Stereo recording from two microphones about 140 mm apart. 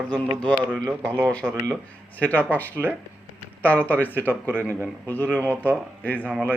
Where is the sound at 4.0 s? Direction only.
10° left (ahead or behind).